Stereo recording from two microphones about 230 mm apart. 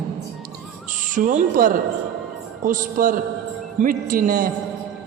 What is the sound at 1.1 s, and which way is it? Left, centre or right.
A man's voice, right.